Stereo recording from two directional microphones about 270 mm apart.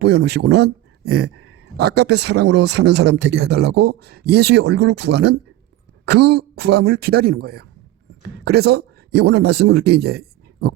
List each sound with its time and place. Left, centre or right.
0.0 s speech: right
1.0 s a sound: right
1.7 s speech: right